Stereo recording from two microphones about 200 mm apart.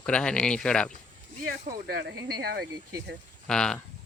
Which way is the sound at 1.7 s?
50° right (ahead or behind).